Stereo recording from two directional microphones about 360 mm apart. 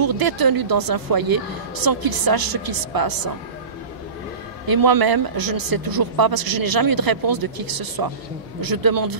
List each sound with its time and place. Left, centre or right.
0.0 s speech: right
4.6 s speech: right